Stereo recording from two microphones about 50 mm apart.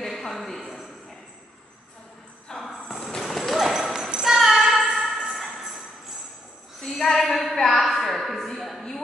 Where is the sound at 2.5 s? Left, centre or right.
Centre.